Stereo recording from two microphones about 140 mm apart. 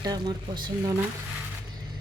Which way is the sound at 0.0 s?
25° right (ahead or behind).